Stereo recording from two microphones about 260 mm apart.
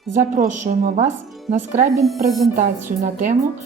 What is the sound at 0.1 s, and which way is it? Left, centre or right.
Speech, right.